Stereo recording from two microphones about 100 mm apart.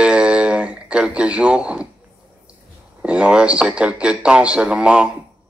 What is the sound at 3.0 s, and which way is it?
A man's voice, 10° right (ahead or behind).